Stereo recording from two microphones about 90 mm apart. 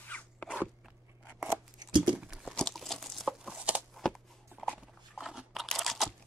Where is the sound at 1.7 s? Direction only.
55° right (ahead or behind).